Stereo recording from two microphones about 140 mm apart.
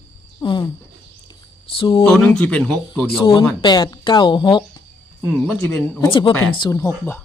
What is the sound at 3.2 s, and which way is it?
Speech, 35° left (ahead or behind).